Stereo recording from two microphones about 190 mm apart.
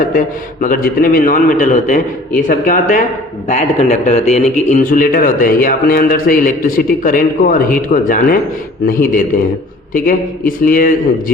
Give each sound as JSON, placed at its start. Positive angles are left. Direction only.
{"t": 0.0, "sound": "speech", "side_deg": 45}